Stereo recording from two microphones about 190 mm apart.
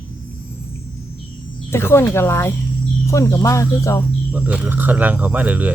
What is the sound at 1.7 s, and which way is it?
Speech, 15° left (ahead or behind).